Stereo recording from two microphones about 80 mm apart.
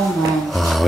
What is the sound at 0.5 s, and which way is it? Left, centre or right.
Mantra, centre.